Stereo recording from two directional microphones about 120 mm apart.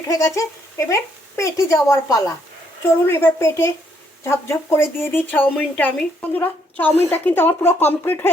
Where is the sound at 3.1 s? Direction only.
20° left (ahead or behind).